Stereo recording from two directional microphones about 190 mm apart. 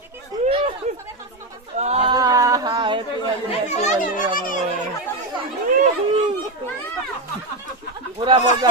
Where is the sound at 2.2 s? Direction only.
20° right (ahead or behind).